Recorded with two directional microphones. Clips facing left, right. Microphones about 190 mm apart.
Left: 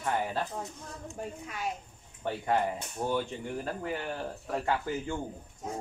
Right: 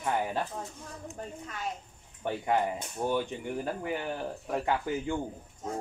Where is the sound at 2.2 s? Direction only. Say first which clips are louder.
Right 1 dB; 15° right (ahead or behind).